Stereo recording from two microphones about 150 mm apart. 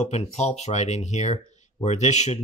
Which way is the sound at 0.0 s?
45° left (ahead or behind).